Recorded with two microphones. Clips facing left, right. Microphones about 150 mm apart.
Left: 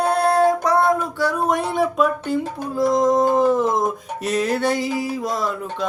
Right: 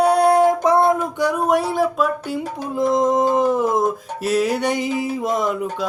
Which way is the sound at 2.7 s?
25° right (ahead or behind).